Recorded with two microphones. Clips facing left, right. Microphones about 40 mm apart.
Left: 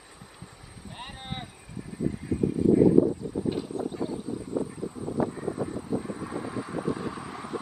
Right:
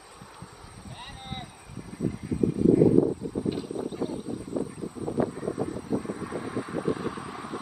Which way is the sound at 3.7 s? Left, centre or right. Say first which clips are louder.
Left 1 dB; right.